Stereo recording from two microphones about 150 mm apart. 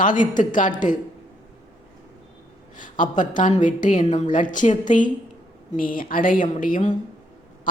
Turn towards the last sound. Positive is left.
turn(degrees=60)  # may be behind; listen again after turning